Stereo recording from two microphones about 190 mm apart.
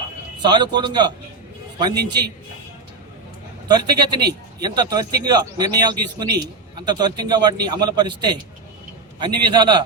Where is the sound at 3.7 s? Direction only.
20° right (ahead or behind).